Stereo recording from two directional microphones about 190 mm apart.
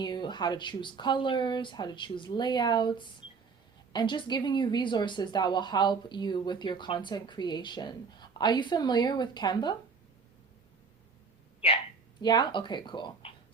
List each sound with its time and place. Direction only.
0.0 s speech: 25° left (ahead or behind)
12.2 s speech: 20° left (ahead or behind)